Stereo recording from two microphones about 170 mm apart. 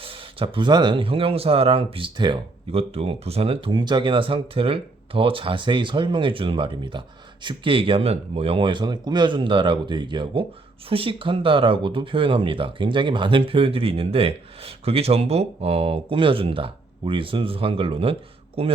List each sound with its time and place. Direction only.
0.0 s speech: 30° right (ahead or behind)